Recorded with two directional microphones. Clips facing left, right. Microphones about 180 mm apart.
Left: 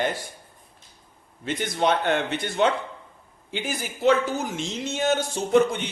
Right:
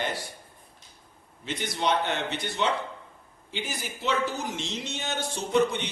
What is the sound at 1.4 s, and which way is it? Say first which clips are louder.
Speech: left 4 dB; 50° left (ahead or behind).